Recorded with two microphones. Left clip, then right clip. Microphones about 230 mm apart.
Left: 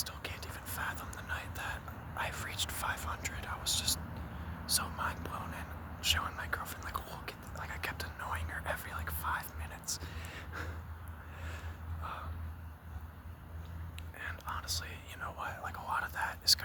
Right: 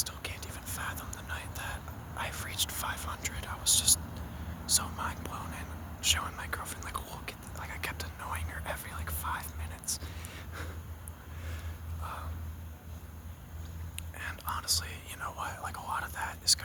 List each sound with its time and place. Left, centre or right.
0.0 s whispering: centre
12.0 s vehicle: centre
13.9 s whispering: centre